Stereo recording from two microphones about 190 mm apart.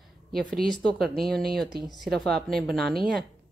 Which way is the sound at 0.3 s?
5° left (ahead or behind).